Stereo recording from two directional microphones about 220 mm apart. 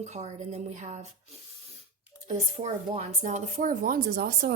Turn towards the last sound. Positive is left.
turn(degrees=-45)  # may be behind; listen again after turning